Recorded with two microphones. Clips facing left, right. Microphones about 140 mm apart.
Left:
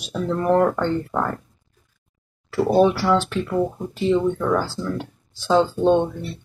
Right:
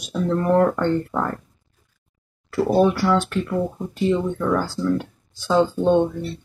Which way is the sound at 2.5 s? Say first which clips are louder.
Left 1 dB; 5° left (ahead or behind).